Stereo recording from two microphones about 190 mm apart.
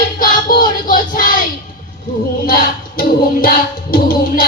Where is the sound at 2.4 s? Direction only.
50° left (ahead or behind).